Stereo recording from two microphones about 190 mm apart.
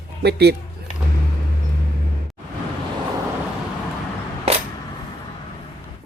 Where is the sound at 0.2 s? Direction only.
60° right (ahead or behind).